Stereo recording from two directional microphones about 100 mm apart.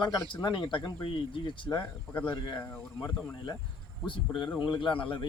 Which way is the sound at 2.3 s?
50° left (ahead or behind).